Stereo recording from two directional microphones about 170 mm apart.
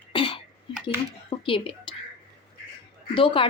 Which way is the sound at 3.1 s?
30° left (ahead or behind).